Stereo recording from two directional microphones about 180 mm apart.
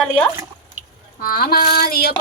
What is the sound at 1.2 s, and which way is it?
Speech, 55° left (ahead or behind).